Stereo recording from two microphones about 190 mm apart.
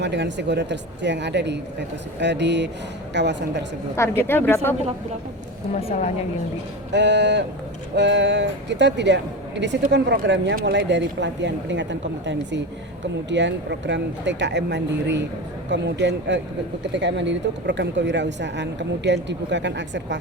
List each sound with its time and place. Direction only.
0.0 s speech: 65° right (ahead or behind)
3.9 s speech: 15° left (ahead or behind)
5.9 s a woman's voice: 40° left (ahead or behind)
6.9 s speech: 65° right (ahead or behind)